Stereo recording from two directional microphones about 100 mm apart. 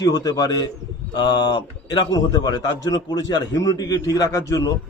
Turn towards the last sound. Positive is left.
turn(degrees=35)  # may be behind; listen again after turning